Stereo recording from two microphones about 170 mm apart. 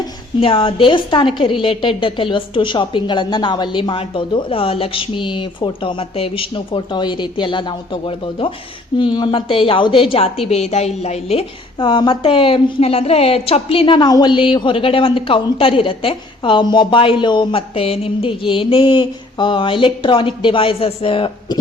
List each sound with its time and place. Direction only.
0.0 s a woman's voice: 30° left (ahead or behind)